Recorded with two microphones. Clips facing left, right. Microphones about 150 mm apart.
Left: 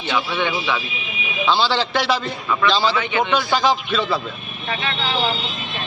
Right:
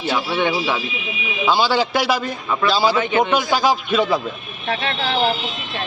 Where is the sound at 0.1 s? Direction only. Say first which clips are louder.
Right 2 dB; 40° right (ahead or behind).